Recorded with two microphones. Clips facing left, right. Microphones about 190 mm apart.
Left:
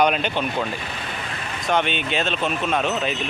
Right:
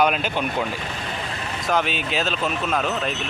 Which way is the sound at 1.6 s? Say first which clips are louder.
Left 1 dB; centre (ahead or behind).